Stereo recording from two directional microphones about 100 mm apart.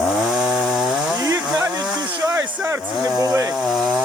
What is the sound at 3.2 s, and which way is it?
Chainsaw, 30° right (ahead or behind).